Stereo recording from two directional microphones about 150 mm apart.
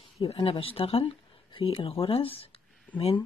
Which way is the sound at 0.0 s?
35° left (ahead or behind).